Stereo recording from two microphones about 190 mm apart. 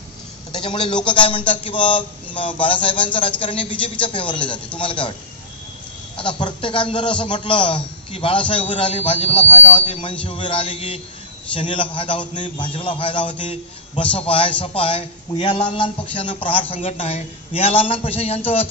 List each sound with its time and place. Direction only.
0.5 s a man's voice: 25° left (ahead or behind)
6.1 s a man's voice: 25° left (ahead or behind)